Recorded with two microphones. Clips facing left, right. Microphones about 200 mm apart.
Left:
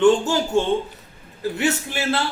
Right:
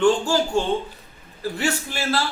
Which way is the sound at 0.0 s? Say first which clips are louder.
Left 2 dB; 20° left (ahead or behind).